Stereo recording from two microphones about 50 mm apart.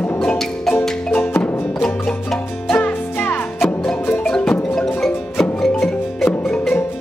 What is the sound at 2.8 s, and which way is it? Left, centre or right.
Music, left.